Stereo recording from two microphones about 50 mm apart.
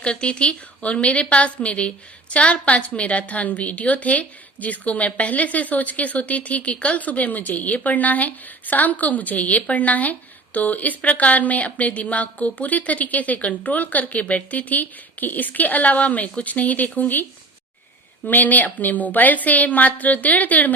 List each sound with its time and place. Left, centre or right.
0.0 s a woman's voice: left
18.3 s a woman's voice: left